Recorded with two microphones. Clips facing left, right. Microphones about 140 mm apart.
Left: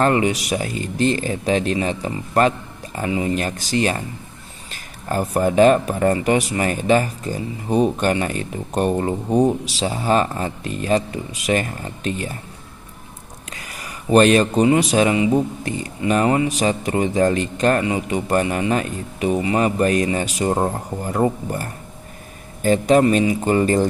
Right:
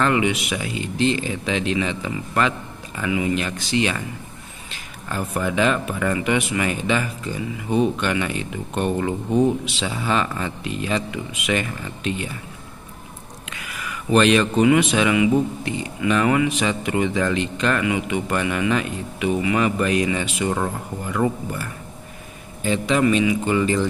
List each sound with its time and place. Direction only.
0.0 s speech: 40° left (ahead or behind)
5.0 s speech: 40° left (ahead or behind)
13.5 s speech: 40° left (ahead or behind)